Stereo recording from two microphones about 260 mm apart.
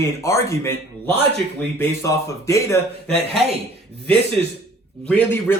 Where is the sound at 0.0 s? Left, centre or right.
Centre.